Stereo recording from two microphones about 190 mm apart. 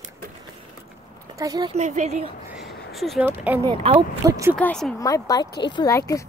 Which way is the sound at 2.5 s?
Centre (ahead or behind).